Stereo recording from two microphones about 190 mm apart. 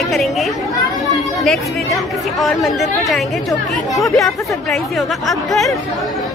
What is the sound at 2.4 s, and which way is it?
Speech, centre (ahead or behind).